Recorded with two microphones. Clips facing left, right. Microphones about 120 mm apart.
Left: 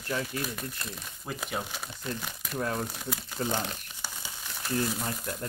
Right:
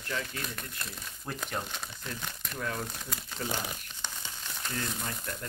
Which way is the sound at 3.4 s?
30° left (ahead or behind).